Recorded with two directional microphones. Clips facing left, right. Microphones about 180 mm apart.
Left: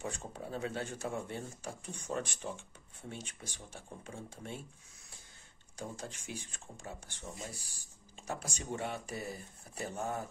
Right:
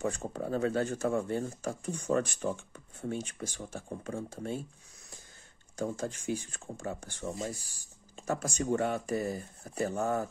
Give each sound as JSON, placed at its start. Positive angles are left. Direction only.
{"t": 0.0, "sound": "speech", "side_deg": -45}
{"t": 5.8, "sound": "speech", "side_deg": -45}